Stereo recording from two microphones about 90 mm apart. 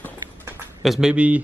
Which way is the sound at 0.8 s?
5° right (ahead or behind).